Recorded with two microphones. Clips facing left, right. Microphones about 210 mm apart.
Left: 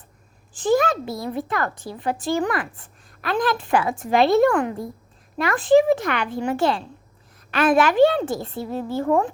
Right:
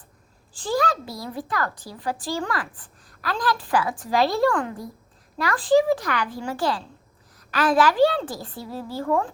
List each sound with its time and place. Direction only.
0.5 s a woman's voice: 20° left (ahead or behind)